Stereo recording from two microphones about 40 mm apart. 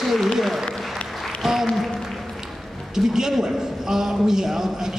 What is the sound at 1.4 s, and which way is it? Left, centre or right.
Applause, centre.